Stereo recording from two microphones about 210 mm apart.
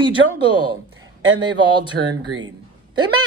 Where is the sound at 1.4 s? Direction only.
20° right (ahead or behind).